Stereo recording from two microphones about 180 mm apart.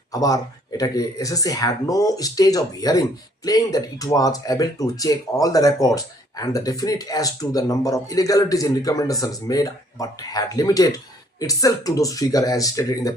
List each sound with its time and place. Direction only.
0.1 s speech: 20° left (ahead or behind)